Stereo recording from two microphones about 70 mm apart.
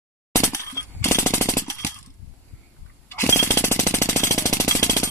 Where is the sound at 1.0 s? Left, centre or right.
Left.